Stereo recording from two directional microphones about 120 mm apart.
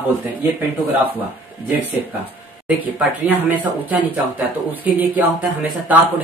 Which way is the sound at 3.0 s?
15° right (ahead or behind).